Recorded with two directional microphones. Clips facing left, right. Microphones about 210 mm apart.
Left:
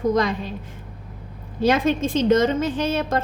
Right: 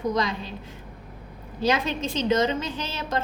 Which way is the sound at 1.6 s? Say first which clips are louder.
Left 6 dB; 50° left (ahead or behind).